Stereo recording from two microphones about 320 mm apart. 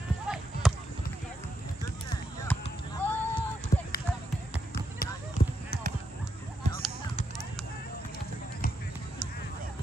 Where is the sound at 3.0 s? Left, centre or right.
Centre.